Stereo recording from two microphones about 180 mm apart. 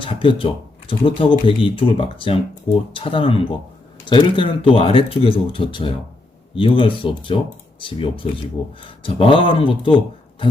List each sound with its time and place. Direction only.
0.0 s speech: 30° left (ahead or behind)